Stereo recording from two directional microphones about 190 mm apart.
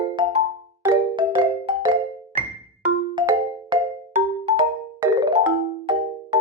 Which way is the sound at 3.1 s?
25° right (ahead or behind).